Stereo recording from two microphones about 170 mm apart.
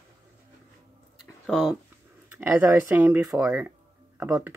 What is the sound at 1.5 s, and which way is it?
Speech, centre (ahead or behind).